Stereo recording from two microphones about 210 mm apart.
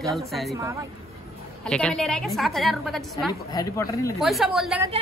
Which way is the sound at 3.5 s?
15° left (ahead or behind).